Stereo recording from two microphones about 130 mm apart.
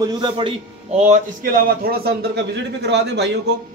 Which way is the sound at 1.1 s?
90° right.